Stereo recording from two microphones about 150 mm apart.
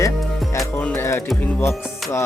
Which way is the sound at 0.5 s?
10° left (ahead or behind).